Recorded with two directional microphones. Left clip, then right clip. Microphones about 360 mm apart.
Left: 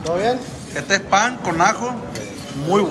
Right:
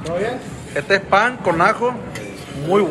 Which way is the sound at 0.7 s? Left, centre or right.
Centre.